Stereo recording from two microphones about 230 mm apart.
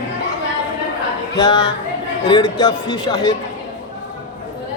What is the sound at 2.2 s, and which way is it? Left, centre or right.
A man's voice, centre.